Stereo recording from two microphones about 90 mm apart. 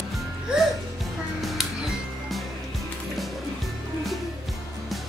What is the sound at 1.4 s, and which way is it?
Music, centre (ahead or behind).